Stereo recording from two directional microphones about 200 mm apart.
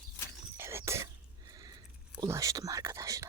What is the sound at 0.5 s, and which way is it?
Cough, 10° right (ahead or behind).